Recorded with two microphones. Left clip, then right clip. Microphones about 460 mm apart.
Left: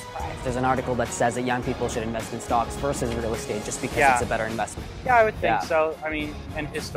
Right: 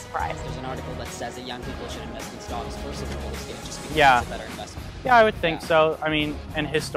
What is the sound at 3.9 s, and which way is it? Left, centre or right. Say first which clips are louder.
Speech: right 2 dB; right.